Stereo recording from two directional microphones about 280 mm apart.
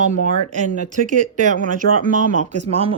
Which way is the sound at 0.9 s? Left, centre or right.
Right.